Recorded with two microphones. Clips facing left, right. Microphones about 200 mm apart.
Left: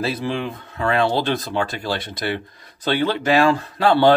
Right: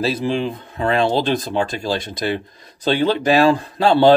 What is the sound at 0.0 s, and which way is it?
Speech, 25° right (ahead or behind).